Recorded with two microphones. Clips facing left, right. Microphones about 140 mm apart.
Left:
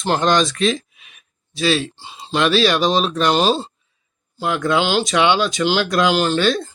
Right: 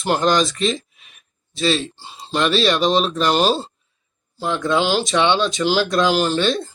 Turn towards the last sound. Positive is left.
turn(degrees=0)  # may be behind; listen again after turning